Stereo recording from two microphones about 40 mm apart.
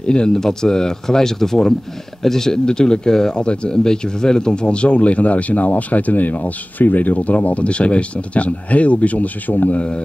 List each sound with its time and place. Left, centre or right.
0.0 s speech: left
9.8 s mantra: left